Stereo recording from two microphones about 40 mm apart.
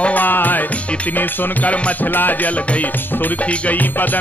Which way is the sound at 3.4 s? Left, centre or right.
Left.